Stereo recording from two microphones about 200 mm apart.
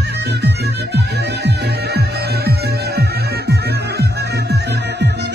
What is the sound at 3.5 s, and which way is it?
Music, 55° right (ahead or behind).